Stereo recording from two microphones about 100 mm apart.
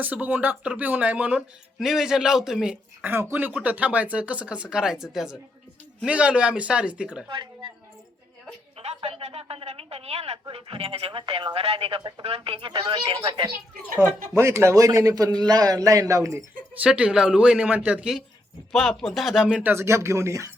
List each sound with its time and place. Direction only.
0.0 s speech: 15° right (ahead or behind)
3.0 s speech: 20° right (ahead or behind)
7.3 s speech: 55° right (ahead or behind)
8.8 s a woman's voice: 80° right
10.5 s speech: 70° right (ahead or behind)
12.2 s speech: 80° right
12.5 s speech: 60° right (ahead or behind)
14.3 s speech: 25° right (ahead or behind)
16.8 s speech: 10° right (ahead or behind)
18.7 s speech: 5° left (ahead or behind)
19.7 s speech: 25° right (ahead or behind)